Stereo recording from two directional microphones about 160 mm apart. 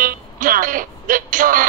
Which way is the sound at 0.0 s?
60° right (ahead or behind).